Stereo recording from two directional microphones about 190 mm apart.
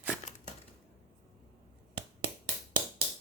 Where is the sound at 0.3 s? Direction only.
35° left (ahead or behind).